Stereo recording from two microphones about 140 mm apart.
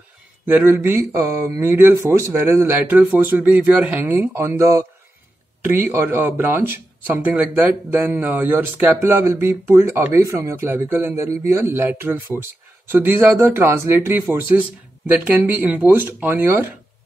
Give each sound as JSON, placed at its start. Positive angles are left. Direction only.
{"t": 0.5, "sound": "speech", "side_deg": -15}